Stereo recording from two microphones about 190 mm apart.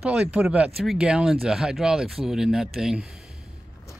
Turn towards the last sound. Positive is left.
turn(degrees=0)  # may be behind; listen again after turning